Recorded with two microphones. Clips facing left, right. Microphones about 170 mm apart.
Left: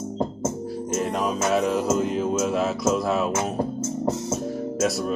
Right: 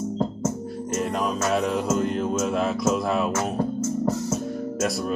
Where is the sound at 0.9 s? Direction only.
Centre (ahead or behind).